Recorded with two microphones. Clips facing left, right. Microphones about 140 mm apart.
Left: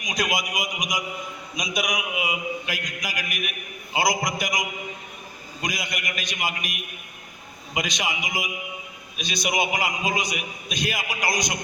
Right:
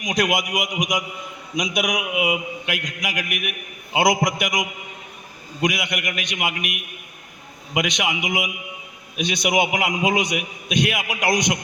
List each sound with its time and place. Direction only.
0.0 s a man's voice: 65° right (ahead or behind)
5.6 s a man's voice: 65° right (ahead or behind)
7.8 s a man's voice: 65° right (ahead or behind)